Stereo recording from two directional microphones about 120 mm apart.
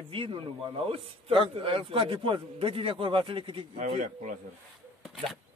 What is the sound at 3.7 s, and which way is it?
Speech, 90° right.